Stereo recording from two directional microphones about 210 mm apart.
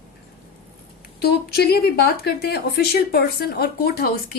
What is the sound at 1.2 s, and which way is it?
Speech, 50° left (ahead or behind).